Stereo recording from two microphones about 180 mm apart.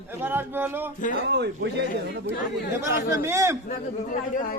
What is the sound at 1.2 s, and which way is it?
Speech, 70° right (ahead or behind).